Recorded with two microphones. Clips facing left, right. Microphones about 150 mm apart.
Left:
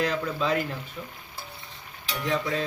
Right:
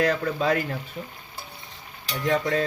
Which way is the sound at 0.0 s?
45° right (ahead or behind).